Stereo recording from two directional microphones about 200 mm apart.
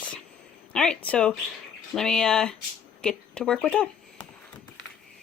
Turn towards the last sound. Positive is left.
turn(degrees=5)  # may be behind; listen again after turning